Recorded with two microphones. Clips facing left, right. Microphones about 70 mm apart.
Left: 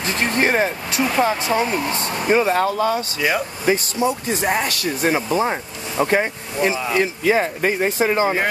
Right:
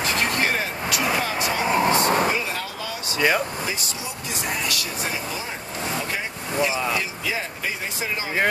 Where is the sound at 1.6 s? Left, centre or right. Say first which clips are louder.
Right 3 dB; right.